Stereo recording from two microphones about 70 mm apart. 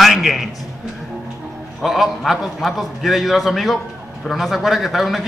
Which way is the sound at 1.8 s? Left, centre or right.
Centre.